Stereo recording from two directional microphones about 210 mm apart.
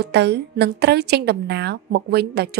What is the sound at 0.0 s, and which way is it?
A woman's voice, 50° right (ahead or behind).